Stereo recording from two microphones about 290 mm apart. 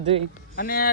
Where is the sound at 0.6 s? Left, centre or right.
Left.